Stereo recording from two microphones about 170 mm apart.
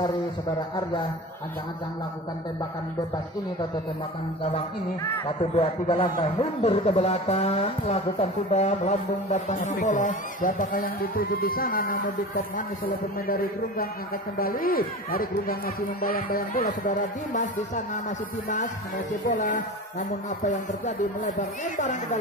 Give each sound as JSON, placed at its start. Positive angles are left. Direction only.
{"t": 4.4, "sound": "a man's voice", "side_deg": 30}
{"t": 19.3, "sound": "speech", "side_deg": 50}